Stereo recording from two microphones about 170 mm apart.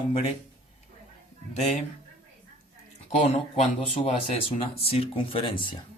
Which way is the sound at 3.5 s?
35° left (ahead or behind).